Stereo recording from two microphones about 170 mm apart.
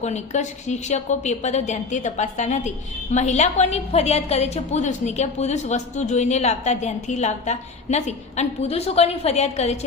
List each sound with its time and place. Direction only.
0.0 s a woman's voice: 40° left (ahead or behind)